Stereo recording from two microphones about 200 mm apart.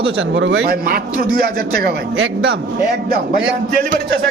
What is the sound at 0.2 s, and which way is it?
A man's voice, 70° right (ahead or behind).